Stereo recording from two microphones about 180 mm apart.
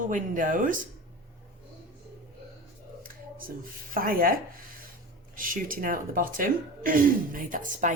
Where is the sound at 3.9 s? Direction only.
50° right (ahead or behind).